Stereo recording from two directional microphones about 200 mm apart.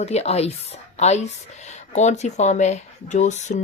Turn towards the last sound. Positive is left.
turn(degrees=35)  # may be behind; listen again after turning